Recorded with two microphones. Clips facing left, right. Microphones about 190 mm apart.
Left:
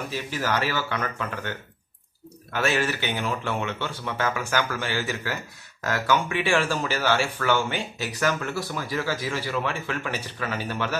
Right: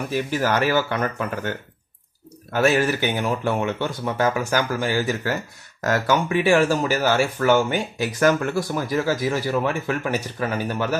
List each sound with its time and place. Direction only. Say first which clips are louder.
0.1 s speech: right 6 dB; 50° right (ahead or behind)
2.5 s speech: right 6 dB; 40° right (ahead or behind)